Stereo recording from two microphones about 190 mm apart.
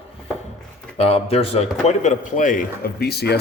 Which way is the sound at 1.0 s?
35° left (ahead or behind).